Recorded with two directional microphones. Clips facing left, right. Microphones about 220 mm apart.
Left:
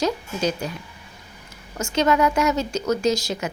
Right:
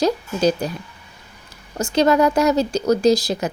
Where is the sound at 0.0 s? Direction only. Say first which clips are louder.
Right 5 dB; 35° right (ahead or behind).